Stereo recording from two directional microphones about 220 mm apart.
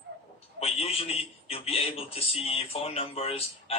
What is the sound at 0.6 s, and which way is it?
A man's voice, 25° left (ahead or behind).